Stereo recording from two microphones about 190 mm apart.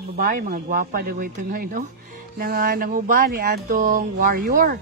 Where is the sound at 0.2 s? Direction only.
45° right (ahead or behind).